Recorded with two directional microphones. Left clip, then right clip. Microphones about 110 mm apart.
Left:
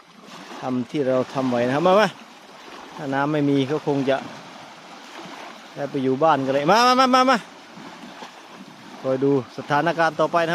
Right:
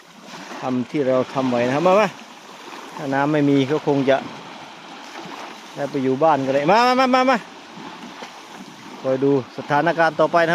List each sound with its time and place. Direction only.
0.6 s speech: 15° left (ahead or behind); by 2.1 s 40° left (ahead or behind)
3.0 s speech: 10° left (ahead or behind)
6.0 s speech: 30° left (ahead or behind)
9.0 s speech: 25° left (ahead or behind); by 10.5 s 10° left (ahead or behind)